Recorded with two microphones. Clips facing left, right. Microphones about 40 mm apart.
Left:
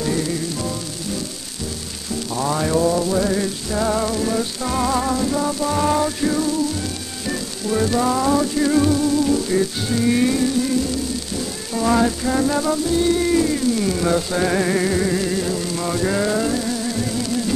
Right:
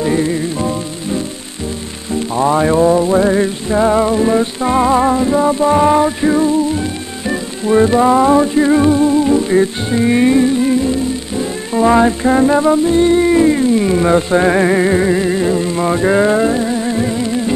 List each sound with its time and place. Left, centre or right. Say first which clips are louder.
0.0 s music: right 7 dB; right